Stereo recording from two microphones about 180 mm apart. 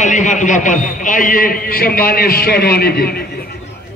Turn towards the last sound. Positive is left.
turn(degrees=60)  # may be behind; listen again after turning